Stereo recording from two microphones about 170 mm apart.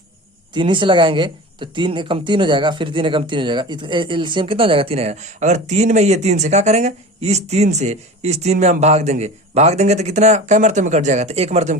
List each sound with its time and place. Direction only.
0.5 s speech: 30° right (ahead or behind)